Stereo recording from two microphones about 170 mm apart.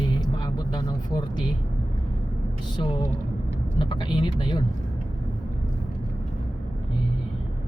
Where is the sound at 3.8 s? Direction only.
25° left (ahead or behind).